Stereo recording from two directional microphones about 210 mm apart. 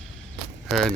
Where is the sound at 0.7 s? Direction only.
Centre (ahead or behind).